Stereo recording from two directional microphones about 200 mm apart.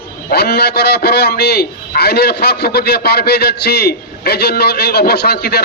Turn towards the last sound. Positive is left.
turn(degrees=55)  # may be behind; listen again after turning